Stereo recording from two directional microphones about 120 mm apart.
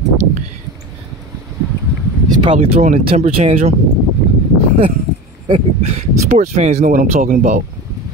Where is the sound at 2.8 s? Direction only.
60° right (ahead or behind).